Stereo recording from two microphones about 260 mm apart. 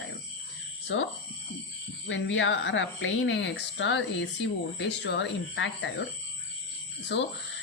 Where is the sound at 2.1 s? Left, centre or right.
Left.